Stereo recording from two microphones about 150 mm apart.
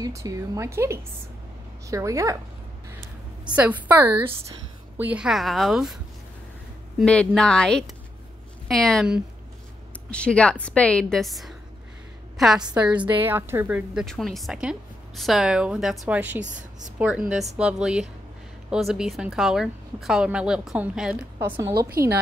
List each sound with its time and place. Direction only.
0.0 s a woman's voice: 20° right (ahead or behind)
3.4 s a woman's voice: 10° right (ahead or behind)
7.1 s a woman's voice: 5° left (ahead or behind); by 14.0 s 10° right (ahead or behind)
14.0 s speech: centre (ahead or behind)
21.7 s a woman's voice: 90° right